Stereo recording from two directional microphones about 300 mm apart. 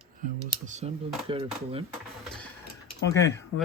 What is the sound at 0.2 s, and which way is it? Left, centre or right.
Speech, right.